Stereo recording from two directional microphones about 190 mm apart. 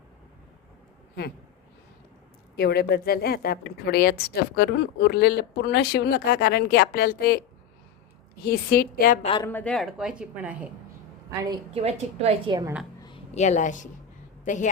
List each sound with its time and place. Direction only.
2.6 s a woman's voice: 55° left (ahead or behind)
8.4 s a woman's voice: 50° left (ahead or behind)
9.4 s speech: 10° left (ahead or behind); by 10.7 s 5° right (ahead or behind)
11.4 s a woman's voice: 30° right (ahead or behind)
13.0 s a sound: 25° left (ahead or behind)
13.3 s a woman's voice: 35° left (ahead or behind)